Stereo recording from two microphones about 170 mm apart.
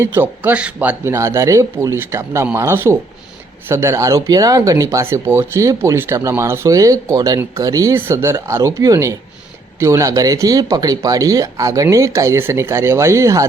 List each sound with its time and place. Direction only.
0.0 s speech: 15° right (ahead or behind)